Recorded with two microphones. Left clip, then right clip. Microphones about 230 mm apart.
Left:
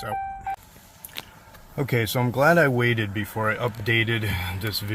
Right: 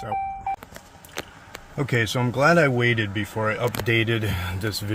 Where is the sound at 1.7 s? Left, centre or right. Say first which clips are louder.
Right 1 dB; centre.